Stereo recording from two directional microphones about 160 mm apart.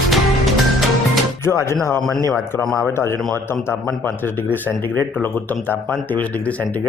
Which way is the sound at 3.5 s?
15° left (ahead or behind).